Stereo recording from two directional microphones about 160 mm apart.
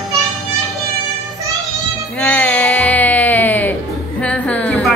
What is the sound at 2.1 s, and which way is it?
Music, 10° left (ahead or behind).